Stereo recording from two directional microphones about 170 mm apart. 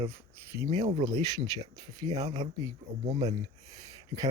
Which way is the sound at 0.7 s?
40° right (ahead or behind).